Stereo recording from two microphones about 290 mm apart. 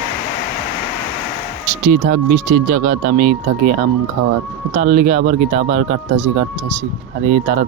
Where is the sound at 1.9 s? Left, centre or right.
Right.